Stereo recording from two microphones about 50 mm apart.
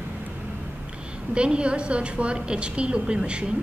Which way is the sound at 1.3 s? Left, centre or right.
Right.